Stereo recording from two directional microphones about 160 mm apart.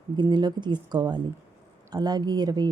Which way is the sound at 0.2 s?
25° right (ahead or behind).